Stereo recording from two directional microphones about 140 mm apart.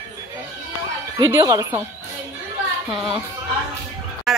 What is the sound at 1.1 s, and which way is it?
Speech, 25° right (ahead or behind).